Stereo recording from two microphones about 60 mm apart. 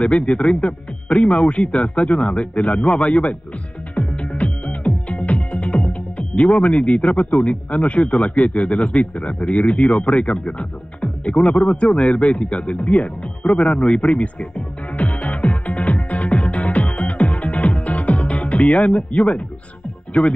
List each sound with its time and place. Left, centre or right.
0.0 s a man's voice: centre
3.9 s music: centre
6.4 s a man's voice: centre
11.3 s a man's voice: centre
15.1 s music: left
18.1 s a man's voice: left